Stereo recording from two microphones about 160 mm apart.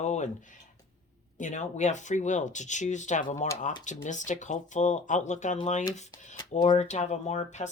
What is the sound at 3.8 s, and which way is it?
Speech, 50° left (ahead or behind).